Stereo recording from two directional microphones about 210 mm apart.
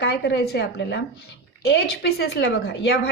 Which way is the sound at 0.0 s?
50° left (ahead or behind).